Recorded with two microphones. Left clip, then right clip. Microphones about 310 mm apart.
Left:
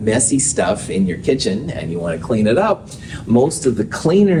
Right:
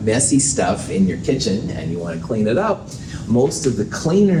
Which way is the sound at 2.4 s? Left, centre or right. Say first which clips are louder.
Left 3 dB; left.